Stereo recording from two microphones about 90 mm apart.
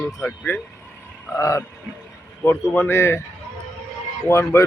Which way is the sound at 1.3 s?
35° left (ahead or behind).